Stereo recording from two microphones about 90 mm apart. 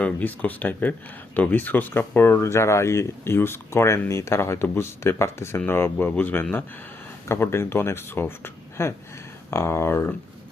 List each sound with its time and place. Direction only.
0.0 s speech: 20° left (ahead or behind)
7.3 s speech: 30° left (ahead or behind)